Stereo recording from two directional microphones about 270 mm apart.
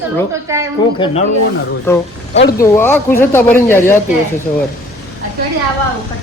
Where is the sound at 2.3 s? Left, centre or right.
Left.